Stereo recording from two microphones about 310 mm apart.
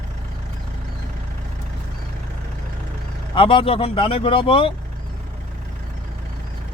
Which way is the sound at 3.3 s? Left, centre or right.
Centre.